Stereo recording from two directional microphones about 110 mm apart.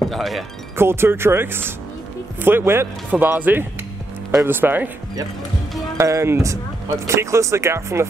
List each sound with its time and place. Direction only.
0.0 s speech: centre (ahead or behind)
0.7 s speech: 20° right (ahead or behind)
5.9 s speech: 25° right (ahead or behind)